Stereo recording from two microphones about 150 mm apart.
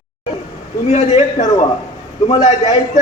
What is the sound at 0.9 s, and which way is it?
Speech, 50° left (ahead or behind).